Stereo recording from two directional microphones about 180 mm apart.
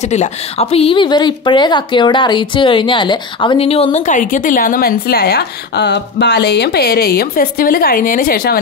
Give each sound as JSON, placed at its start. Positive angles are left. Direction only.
{"t": 0.1, "sound": "speech", "side_deg": 35}